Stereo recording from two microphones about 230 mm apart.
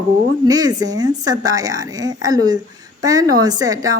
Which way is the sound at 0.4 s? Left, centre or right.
Centre.